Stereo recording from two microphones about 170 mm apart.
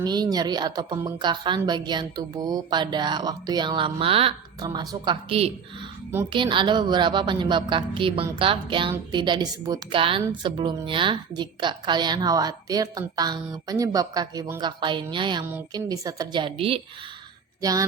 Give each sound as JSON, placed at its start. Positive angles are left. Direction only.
{"t": 0.0, "sound": "a woman's voice", "side_deg": -25}
{"t": 4.6, "sound": "a woman's voice", "side_deg": -25}
{"t": 6.3, "sound": "a woman's voice", "side_deg": -30}
{"t": 17.6, "sound": "a woman's voice", "side_deg": -20}